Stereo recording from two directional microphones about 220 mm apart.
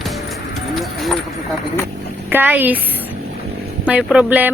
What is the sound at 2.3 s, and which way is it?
Speech, 10° right (ahead or behind).